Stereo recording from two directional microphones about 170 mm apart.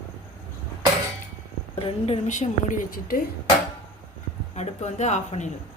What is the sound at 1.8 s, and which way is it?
A woman's voice, 35° left (ahead or behind).